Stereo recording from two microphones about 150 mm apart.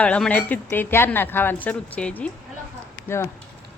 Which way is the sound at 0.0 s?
10° left (ahead or behind).